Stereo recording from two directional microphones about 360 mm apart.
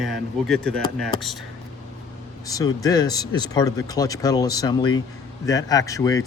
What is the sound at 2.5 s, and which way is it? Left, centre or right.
Speech, centre.